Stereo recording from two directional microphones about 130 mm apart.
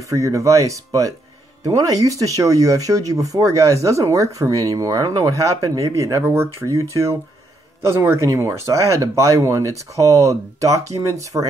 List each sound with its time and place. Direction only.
0.0 s speech: 25° right (ahead or behind)